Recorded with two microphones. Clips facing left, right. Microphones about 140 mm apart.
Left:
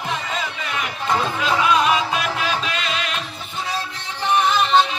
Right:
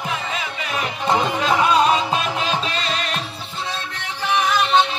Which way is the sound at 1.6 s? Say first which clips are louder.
Right 1 dB; 35° right (ahead or behind).